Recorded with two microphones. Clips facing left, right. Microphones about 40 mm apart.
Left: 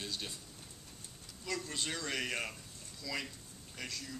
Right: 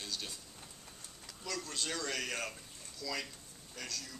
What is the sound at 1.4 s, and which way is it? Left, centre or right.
Speech, left.